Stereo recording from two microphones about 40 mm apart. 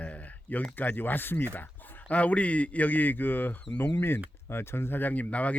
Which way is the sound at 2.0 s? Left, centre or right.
Left.